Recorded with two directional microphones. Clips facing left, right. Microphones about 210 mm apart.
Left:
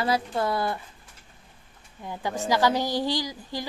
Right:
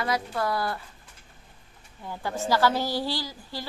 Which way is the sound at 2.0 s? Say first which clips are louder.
Left 1 dB; 15° left (ahead or behind).